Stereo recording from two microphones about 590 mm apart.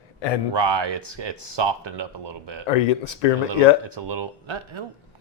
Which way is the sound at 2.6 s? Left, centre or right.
Left.